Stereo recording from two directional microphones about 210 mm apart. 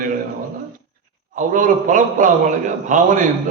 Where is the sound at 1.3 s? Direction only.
35° right (ahead or behind).